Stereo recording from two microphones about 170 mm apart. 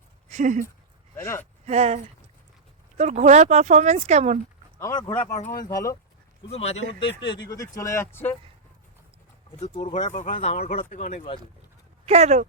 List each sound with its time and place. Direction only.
0.3 s speech: 45° right (ahead or behind)
1.1 s speech: 15° left (ahead or behind)
1.6 s speech: 40° right (ahead or behind)
3.0 s speech: 45° right (ahead or behind)
4.8 s speech: 25° left (ahead or behind)
6.5 s speech: 40° left (ahead or behind)
7.2 s speech: 25° left (ahead or behind)
9.6 s speech: 40° left (ahead or behind)
12.0 s speech: 40° right (ahead or behind)